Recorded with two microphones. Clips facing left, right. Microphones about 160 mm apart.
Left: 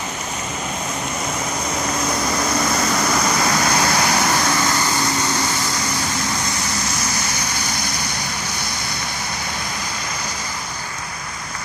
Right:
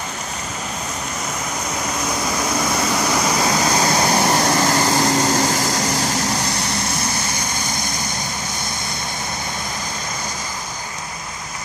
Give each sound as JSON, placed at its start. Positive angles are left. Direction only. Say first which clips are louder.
{"t": 2.5, "sound": "vehicle", "louder": "even", "side_deg": -10}
{"t": 7.6, "sound": "vehicle", "louder": "even", "side_deg": -50}